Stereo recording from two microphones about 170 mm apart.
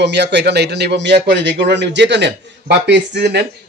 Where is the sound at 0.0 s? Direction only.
90° right.